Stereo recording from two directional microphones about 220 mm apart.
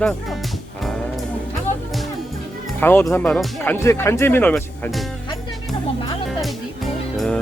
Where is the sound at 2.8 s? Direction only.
10° left (ahead or behind).